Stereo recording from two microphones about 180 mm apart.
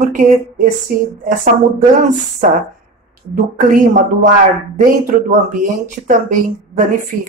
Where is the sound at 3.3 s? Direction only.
45° right (ahead or behind).